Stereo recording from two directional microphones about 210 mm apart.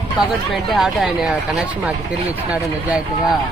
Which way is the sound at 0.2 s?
Centre (ahead or behind).